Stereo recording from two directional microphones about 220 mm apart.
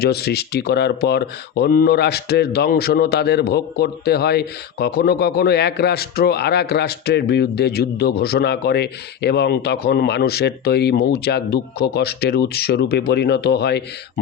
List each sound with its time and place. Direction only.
0.0 s speech: 45° left (ahead or behind)